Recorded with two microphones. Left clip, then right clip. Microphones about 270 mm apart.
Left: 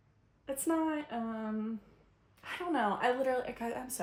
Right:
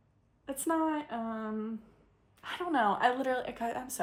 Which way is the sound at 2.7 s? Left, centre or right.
Centre.